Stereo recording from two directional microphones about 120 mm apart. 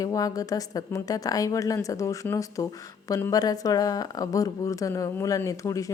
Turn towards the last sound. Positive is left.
turn(degrees=25)  # may be behind; listen again after turning